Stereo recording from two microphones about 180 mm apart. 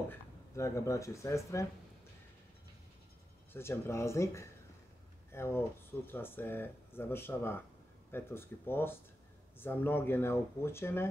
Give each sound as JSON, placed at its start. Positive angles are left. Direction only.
{"t": 0.1, "sound": "speech", "side_deg": 15}
{"t": 3.5, "sound": "speech", "side_deg": 15}